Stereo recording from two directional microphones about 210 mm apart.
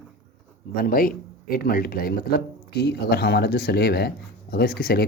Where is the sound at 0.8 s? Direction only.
45° left (ahead or behind).